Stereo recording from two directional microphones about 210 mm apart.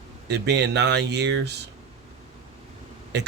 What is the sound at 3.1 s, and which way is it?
Speech, 55° right (ahead or behind).